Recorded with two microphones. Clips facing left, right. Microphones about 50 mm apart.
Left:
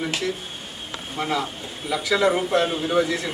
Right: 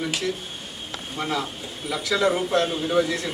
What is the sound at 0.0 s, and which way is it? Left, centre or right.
A man's voice, centre.